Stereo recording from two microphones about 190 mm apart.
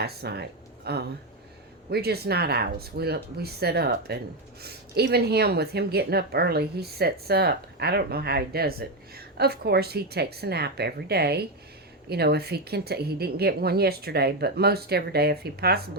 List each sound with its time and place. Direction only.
0.0 s a woman's voice: 55° right (ahead or behind)